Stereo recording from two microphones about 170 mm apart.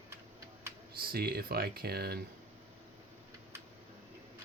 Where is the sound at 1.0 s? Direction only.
65° right (ahead or behind).